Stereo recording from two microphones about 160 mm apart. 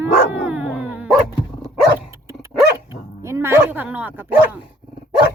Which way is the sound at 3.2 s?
15° right (ahead or behind).